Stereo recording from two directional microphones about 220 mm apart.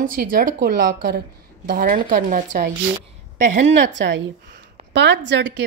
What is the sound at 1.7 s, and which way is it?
Speech, 35° right (ahead or behind).